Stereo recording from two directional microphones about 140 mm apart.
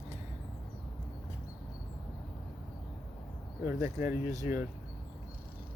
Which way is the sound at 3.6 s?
15° right (ahead or behind).